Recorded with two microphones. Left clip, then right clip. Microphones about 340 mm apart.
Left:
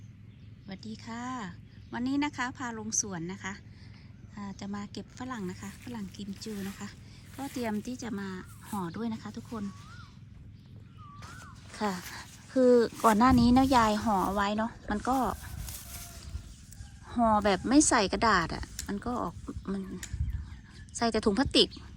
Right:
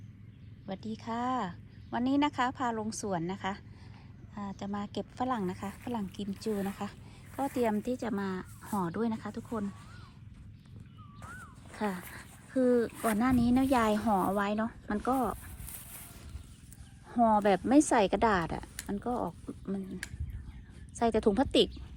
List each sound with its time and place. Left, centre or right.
0.7 s speech: centre
11.7 s speech: centre
17.1 s speech: centre
20.9 s speech: centre